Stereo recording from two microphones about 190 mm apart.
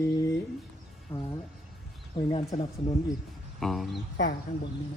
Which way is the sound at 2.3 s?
30° left (ahead or behind).